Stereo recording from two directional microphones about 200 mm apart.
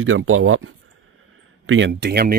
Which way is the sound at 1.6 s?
75° right (ahead or behind).